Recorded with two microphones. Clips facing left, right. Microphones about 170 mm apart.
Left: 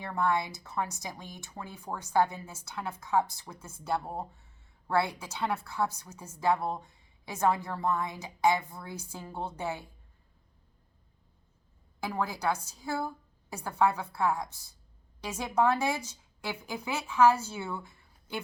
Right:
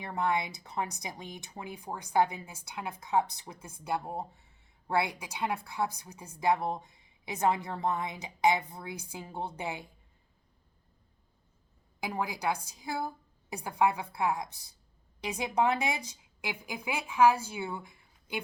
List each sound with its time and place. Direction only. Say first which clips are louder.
0.0 s a woman's voice: left 1 dB; 15° right (ahead or behind)
11.9 s a woman's voice: left 1 dB; 15° right (ahead or behind)